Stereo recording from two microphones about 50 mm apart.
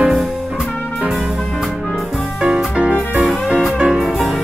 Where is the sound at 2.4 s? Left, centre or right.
Centre.